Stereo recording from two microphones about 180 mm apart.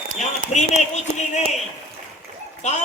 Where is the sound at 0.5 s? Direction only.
40° left (ahead or behind).